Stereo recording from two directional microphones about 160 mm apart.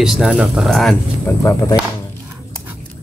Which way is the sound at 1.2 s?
20° left (ahead or behind).